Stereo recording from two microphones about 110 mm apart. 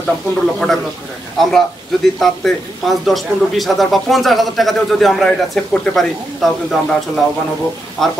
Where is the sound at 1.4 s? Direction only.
5° left (ahead or behind).